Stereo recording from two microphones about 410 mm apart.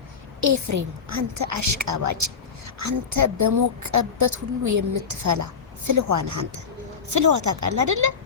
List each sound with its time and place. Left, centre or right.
0.4 s a woman's voice: right